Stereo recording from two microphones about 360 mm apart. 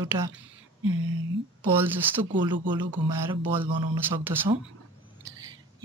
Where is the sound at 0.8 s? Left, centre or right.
Right.